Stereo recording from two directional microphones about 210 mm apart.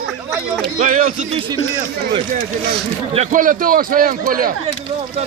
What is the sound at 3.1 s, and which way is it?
A man's voice, 35° right (ahead or behind).